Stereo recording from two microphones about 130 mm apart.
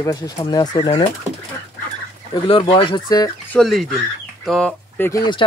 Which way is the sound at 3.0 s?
30° left (ahead or behind).